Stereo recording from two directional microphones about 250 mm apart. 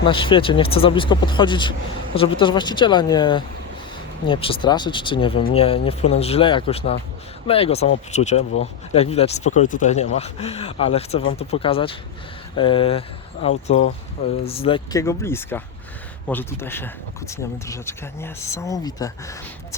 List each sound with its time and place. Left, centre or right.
0.0 s speech: centre